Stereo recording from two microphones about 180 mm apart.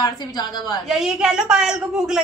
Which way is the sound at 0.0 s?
20° left (ahead or behind).